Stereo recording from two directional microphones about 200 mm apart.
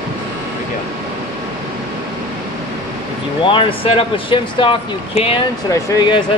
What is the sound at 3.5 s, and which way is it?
Speech, 25° left (ahead or behind).